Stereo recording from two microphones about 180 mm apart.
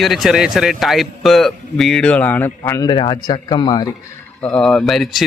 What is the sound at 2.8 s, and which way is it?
Speech, 25° left (ahead or behind).